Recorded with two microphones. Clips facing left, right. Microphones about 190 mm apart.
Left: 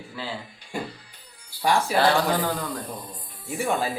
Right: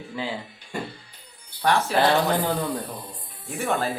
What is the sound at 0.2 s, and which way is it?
Speech, 15° right (ahead or behind).